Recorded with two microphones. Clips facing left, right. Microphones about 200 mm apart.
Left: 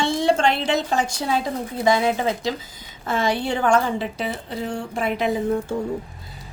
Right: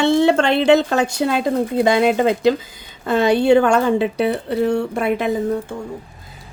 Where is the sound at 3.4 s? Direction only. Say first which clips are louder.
Right 7 dB; 65° right (ahead or behind).